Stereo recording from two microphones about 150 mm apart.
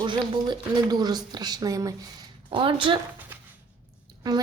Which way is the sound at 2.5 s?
35° right (ahead or behind).